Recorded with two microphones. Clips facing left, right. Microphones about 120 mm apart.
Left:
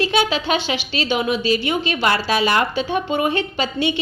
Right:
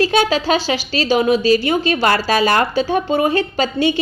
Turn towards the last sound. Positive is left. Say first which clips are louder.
# right 4 dB
turn(degrees=-40)  # may be behind; listen again after turning